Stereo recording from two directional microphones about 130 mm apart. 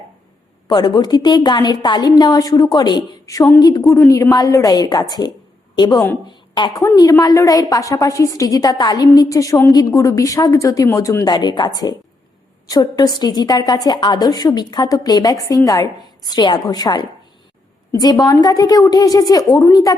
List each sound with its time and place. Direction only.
0.7 s a woman's voice: 35° left (ahead or behind)